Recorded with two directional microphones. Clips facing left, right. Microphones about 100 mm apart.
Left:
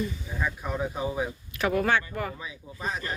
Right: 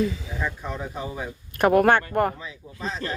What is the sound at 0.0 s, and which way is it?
Speech, 90° right.